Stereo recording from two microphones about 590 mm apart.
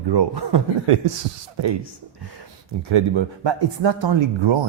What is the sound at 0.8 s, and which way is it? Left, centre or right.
Speech, right.